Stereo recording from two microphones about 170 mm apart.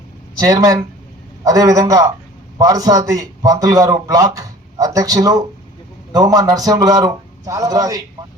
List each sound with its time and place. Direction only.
0.3 s a man's voice: 20° right (ahead or behind)